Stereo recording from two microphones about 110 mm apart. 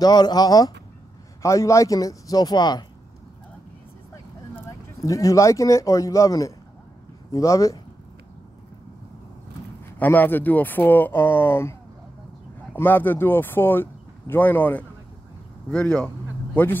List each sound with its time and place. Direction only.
0.0 s speech: 40° left (ahead or behind)
4.6 s speech: 30° left (ahead or behind)
9.9 s speech: 15° left (ahead or behind)
12.7 s speech: 20° left (ahead or behind)